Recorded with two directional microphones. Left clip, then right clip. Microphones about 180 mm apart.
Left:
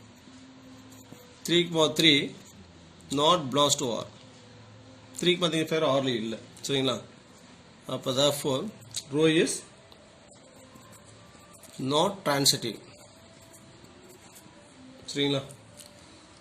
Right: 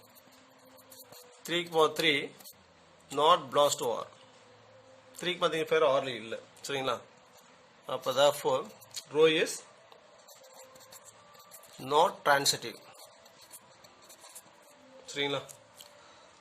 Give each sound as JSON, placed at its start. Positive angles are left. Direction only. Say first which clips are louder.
{"t": 1.5, "sound": "speech", "louder": "left 3 dB", "side_deg": -45}
{"t": 5.2, "sound": "speech", "louder": "left 4 dB", "side_deg": -45}
{"t": 11.9, "sound": "speech", "louder": "right 1 dB", "side_deg": -50}
{"t": 15.0, "sound": "speech", "louder": "left 4 dB", "side_deg": -50}